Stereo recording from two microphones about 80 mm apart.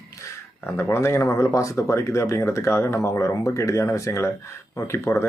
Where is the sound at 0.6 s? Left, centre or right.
Left.